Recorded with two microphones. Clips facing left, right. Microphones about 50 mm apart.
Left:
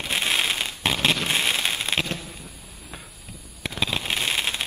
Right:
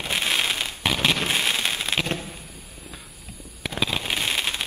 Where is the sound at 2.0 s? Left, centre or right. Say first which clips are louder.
Right 3 dB; right.